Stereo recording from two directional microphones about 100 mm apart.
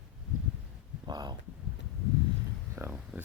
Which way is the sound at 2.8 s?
15° right (ahead or behind).